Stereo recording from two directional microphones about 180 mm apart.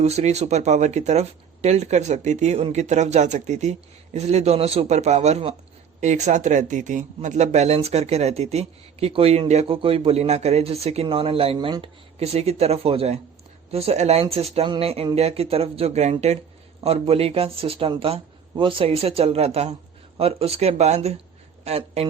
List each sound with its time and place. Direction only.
0.0 s speech: 35° right (ahead or behind)